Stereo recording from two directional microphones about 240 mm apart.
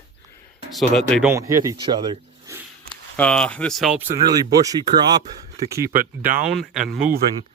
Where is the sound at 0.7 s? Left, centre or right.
Centre.